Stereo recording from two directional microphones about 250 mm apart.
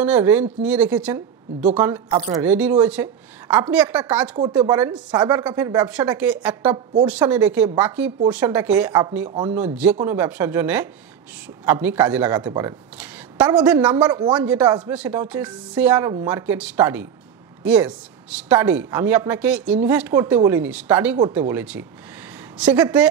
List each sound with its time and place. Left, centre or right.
0.0 s a woman's voice: centre
2.0 s speech: right
2.3 s a woman's voice: centre
13.9 s speech: centre
14.3 s a woman's voice: centre